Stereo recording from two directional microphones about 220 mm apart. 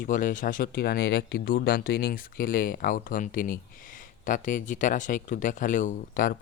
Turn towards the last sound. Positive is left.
turn(degrees=35)  # may be behind; listen again after turning